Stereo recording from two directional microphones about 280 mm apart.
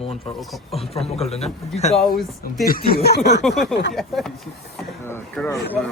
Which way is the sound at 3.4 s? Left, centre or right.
Centre.